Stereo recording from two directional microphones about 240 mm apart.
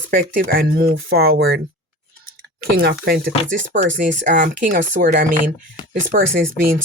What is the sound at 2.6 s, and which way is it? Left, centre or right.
Speech, right.